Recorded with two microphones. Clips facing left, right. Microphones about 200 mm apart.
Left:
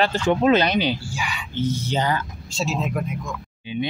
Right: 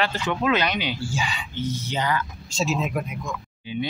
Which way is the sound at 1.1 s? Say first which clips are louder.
Right 2 dB; 25° right (ahead or behind).